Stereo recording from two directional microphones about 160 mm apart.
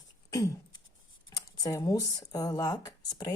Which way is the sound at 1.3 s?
25° left (ahead or behind).